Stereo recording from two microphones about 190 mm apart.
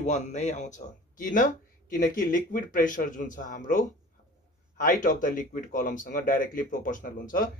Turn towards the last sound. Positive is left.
turn(degrees=45)  # may be behind; listen again after turning